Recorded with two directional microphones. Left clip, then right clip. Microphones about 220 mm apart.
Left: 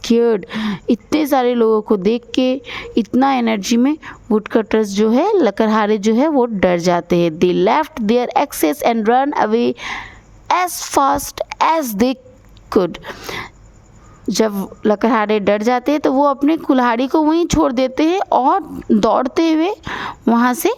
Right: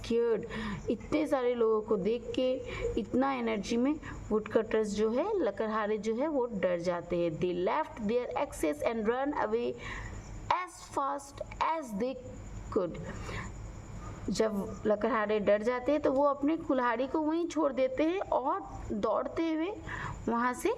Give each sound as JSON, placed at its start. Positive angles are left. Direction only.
{"t": 0.0, "sound": "speech", "side_deg": 50}